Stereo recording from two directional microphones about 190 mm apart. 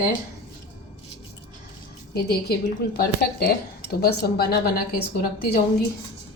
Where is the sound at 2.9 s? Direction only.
50° left (ahead or behind).